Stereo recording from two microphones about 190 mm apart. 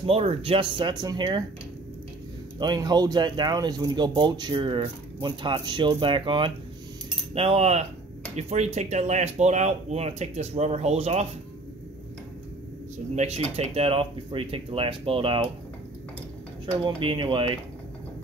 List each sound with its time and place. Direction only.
0.0 s speech: 30° right (ahead or behind)
2.6 s speech: 20° right (ahead or behind)
13.1 s speech: 35° right (ahead or behind)
16.7 s speech: 25° right (ahead or behind)